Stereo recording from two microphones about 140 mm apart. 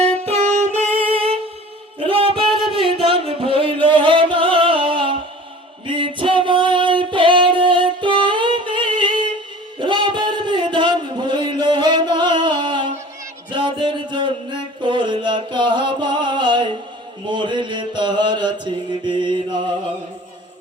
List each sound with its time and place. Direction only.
0.3 s music: 55° right (ahead or behind)
1.1 s music: 40° right (ahead or behind)
9.7 s a sound: 35° right (ahead or behind)
17.2 s mantra: 35° right (ahead or behind)